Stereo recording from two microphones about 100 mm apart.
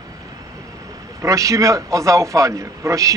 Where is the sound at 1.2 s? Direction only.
30° right (ahead or behind).